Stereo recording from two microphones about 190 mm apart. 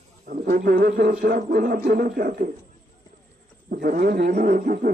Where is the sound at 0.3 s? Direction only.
45° right (ahead or behind).